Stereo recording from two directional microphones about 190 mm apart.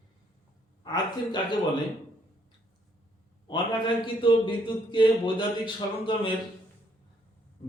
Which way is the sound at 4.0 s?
25° left (ahead or behind).